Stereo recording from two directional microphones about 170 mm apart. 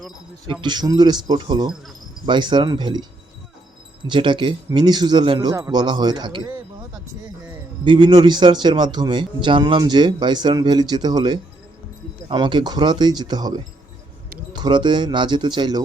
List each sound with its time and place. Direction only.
0.4 s speech: 25° right (ahead or behind)
7.9 s speech: 25° right (ahead or behind)